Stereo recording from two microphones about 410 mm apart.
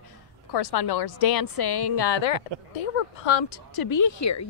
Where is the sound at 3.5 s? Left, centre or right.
Left.